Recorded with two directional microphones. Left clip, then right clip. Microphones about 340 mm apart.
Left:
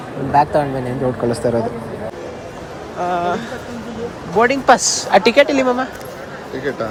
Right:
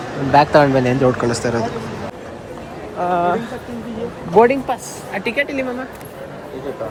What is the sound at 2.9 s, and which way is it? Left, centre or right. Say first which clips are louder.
Speech: right 2 dB; centre.